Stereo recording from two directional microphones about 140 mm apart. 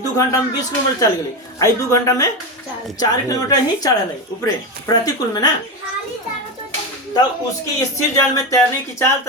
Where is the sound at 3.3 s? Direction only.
25° left (ahead or behind).